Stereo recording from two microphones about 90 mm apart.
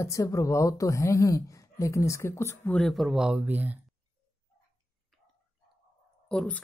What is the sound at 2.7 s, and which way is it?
Speech, 5° left (ahead or behind).